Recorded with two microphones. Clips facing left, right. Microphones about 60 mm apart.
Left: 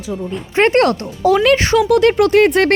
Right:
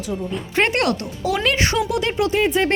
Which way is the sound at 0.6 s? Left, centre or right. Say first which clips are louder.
Left 8 dB; left.